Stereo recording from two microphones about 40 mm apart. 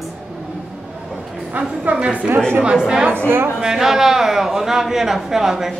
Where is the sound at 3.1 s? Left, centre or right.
Right.